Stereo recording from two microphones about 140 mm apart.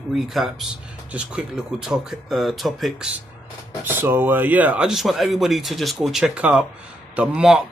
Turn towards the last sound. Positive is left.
turn(degrees=-5)  # may be behind; listen again after turning